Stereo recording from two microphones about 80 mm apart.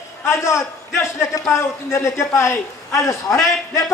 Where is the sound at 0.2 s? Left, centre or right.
Left.